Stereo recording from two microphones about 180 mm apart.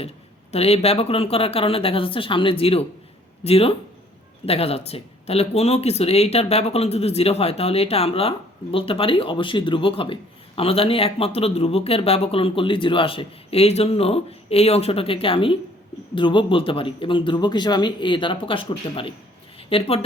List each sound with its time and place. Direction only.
0.5 s speech: 35° left (ahead or behind)